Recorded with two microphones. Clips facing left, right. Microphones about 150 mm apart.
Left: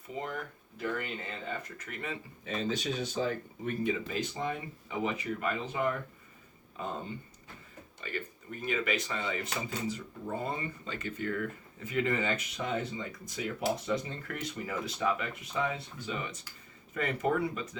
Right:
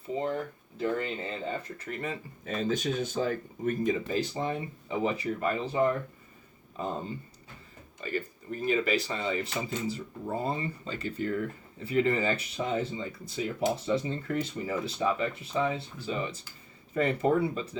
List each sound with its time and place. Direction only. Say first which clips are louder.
0.2 s speech: right 4 dB; 30° right (ahead or behind)
8.0 s speech: right 6 dB; 35° right (ahead or behind)